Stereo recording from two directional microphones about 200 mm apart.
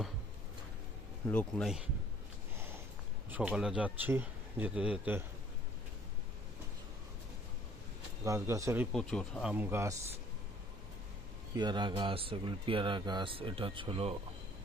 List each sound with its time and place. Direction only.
1.3 s speech: 5° left (ahead or behind)
3.2 s speech: 5° right (ahead or behind)
8.2 s speech: 15° right (ahead or behind)
8.9 s speech: 5° left (ahead or behind)
9.5 s speech: 10° right (ahead or behind)
11.5 s speech: 20° right (ahead or behind)